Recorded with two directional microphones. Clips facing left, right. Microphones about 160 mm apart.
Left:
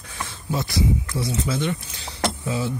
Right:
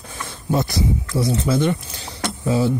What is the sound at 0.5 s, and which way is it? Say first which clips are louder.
Speech: right 3 dB; 55° right (ahead or behind).